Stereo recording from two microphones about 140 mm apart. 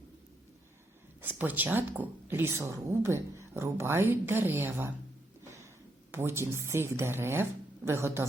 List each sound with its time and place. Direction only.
1.2 s a woman's voice: 15° right (ahead or behind)
6.1 s a woman's voice: 20° right (ahead or behind)